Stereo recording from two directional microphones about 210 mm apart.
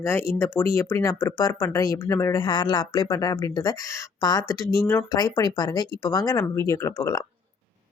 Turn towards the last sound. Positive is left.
turn(degrees=15)  # may be behind; listen again after turning